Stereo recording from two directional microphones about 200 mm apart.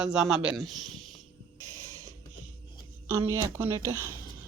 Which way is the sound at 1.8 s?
15° right (ahead or behind).